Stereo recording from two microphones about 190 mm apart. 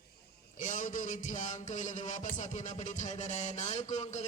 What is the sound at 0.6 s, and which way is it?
Music, 45° left (ahead or behind).